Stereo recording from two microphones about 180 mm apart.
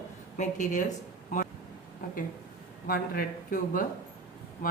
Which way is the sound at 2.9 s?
50° left (ahead or behind).